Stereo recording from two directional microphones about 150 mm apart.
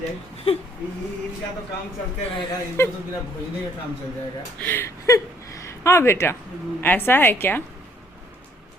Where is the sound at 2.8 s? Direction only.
15° left (ahead or behind).